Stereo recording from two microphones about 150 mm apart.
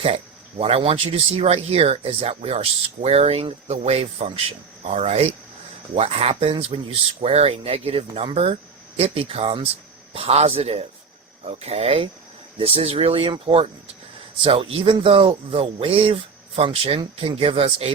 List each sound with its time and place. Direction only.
0.6 s a man's voice: 40° right (ahead or behind)